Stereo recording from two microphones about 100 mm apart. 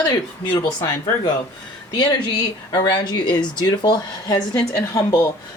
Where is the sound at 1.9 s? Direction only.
45° left (ahead or behind).